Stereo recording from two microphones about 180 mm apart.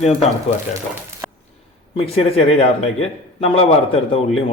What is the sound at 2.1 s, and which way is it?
A man's voice, 35° left (ahead or behind).